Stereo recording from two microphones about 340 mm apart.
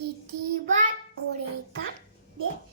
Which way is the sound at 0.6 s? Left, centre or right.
Right.